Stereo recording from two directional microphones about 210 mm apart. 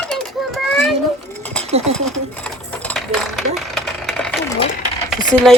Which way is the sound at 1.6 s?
30° right (ahead or behind).